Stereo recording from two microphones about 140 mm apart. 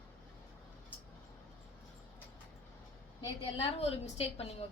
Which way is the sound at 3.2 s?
40° left (ahead or behind).